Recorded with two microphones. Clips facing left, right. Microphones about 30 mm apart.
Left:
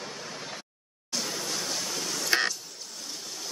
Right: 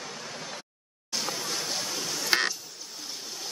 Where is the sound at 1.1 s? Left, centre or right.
Centre.